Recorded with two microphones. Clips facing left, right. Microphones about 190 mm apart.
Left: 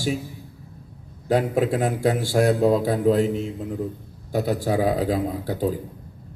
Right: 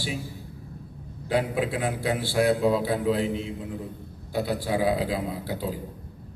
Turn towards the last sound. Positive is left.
turn(degrees=45)  # may be behind; listen again after turning